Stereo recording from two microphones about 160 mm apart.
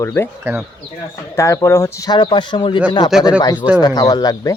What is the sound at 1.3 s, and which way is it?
Speech, 20° left (ahead or behind).